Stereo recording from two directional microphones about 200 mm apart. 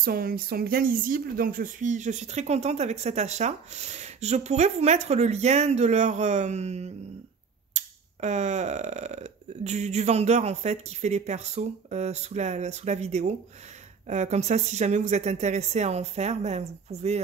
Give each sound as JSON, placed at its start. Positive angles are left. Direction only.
{"t": 0.0, "sound": "speech", "side_deg": -50}